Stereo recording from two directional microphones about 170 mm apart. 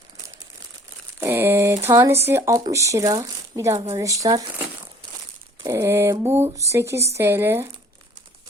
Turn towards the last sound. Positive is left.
turn(degrees=-15)  # may be behind; listen again after turning